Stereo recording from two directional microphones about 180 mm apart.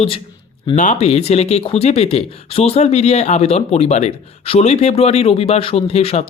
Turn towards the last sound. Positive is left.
turn(degrees=35)  # may be behind; listen again after turning